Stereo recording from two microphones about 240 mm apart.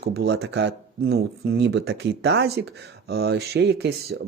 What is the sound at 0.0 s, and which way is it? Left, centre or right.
Speech, right.